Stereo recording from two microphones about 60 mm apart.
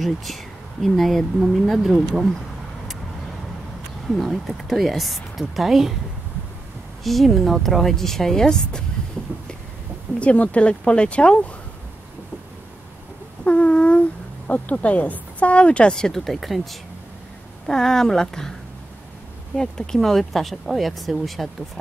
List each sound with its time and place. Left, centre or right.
0.0 s speech: centre
4.1 s speech: centre
7.0 s speech: centre
10.1 s speech: left
13.4 s a sound: centre
14.5 s speech: left; by 16.6 s centre
17.6 s speech: centre
19.5 s speech: centre